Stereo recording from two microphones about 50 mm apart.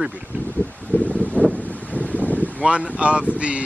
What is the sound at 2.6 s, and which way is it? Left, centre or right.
Speech, right.